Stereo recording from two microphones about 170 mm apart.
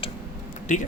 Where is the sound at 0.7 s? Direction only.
45° left (ahead or behind).